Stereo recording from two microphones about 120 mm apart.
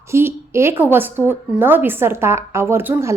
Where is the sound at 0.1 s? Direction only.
20° right (ahead or behind).